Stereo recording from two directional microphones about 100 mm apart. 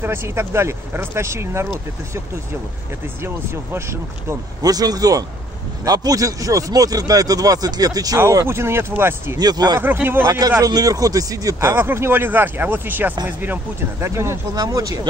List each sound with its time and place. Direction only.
0.0 s speech: 25° right (ahead or behind)
3.7 s speech: 25° right (ahead or behind)
8.5 s speech: 25° right (ahead or behind)
9.4 s speech: 45° right (ahead or behind)
9.8 s speech: 20° right (ahead or behind)
10.6 s speech: 35° right (ahead or behind)
11.7 s speech: 25° right (ahead or behind)
14.5 s speech: 40° right (ahead or behind)